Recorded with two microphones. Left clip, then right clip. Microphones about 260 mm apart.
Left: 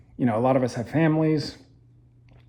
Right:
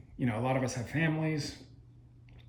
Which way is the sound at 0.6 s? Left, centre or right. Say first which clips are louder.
Left 9 dB; centre.